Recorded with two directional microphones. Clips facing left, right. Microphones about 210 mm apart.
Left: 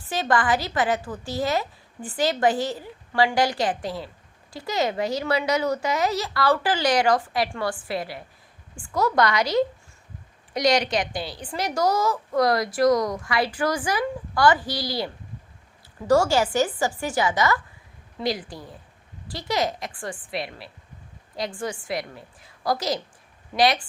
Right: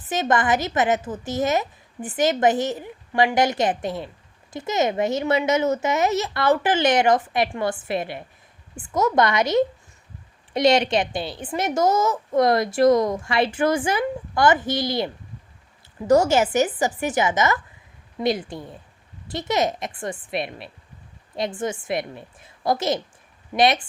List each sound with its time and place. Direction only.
0.0 s a woman's voice: 20° right (ahead or behind)